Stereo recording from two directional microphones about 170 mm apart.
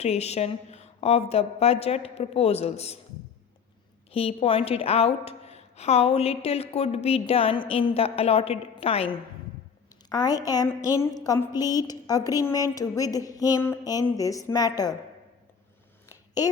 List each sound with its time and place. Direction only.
0.0 s a woman's voice: 40° left (ahead or behind)
4.1 s a woman's voice: 35° left (ahead or behind)
10.1 s a woman's voice: 25° left (ahead or behind)
16.4 s a woman's voice: 20° left (ahead or behind)